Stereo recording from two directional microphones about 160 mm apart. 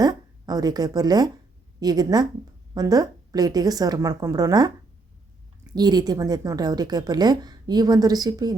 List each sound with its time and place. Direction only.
0.0 s a woman's voice: 25° right (ahead or behind)
5.7 s a woman's voice: 25° right (ahead or behind)